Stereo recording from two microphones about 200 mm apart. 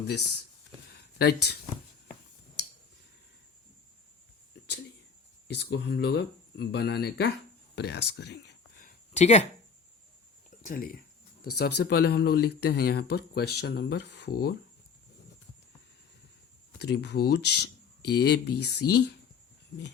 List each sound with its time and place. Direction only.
1.2 s speech: 55° left (ahead or behind)
5.5 s speech: 55° left (ahead or behind)
9.1 s speech: 35° left (ahead or behind)
10.6 s speech: 45° left (ahead or behind)
11.5 s speech: 55° left (ahead or behind)
16.7 s speech: 55° left (ahead or behind)